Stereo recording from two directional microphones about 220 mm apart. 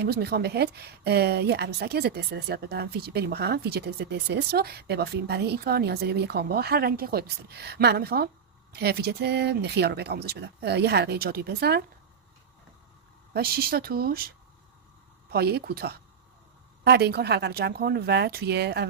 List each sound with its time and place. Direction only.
0.0 s a woman's voice: 45° right (ahead or behind)
13.3 s a woman's voice: 45° right (ahead or behind)